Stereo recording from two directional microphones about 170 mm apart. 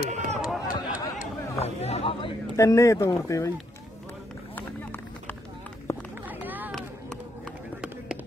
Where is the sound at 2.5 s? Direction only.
15° left (ahead or behind).